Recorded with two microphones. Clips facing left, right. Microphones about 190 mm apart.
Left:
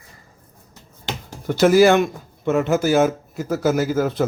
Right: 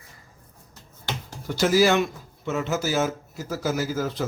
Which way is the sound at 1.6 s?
55° left (ahead or behind).